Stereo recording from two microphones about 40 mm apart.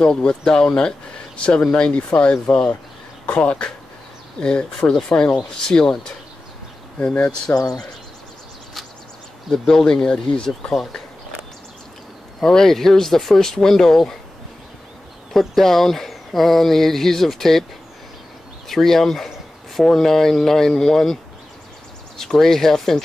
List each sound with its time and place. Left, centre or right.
0.0 s speech: left
4.4 s speech: left
5.1 s speech: left
5.6 s speech: centre
7.1 s speech: left
9.5 s speech: centre
12.4 s speech: centre
15.3 s speech: centre
18.7 s speech: centre